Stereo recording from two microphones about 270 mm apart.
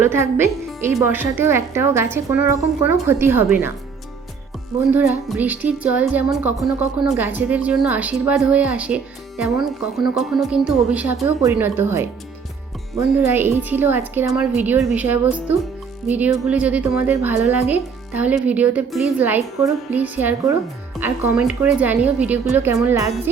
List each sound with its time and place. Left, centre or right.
0.0 s a woman's voice: centre
4.8 s a woman's voice: centre
13.1 s a woman's voice: centre